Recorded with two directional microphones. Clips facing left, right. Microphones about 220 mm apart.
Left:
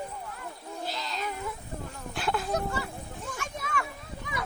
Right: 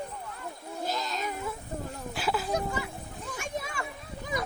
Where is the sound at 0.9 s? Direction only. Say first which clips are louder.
Right 3 dB; 45° right (ahead or behind).